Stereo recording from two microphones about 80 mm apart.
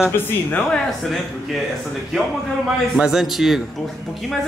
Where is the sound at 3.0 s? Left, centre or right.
Centre.